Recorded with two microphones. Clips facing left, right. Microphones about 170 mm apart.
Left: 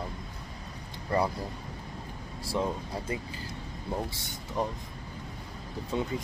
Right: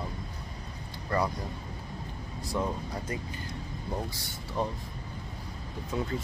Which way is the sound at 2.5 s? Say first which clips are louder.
Left 1 dB; 30° left (ahead or behind).